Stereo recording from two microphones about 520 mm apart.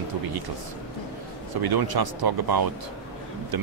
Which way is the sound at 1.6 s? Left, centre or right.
Right.